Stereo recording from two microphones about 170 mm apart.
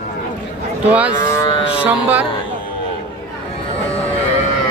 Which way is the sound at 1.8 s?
10° right (ahead or behind).